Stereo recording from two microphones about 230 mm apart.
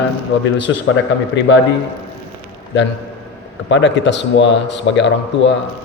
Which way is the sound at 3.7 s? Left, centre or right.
Left.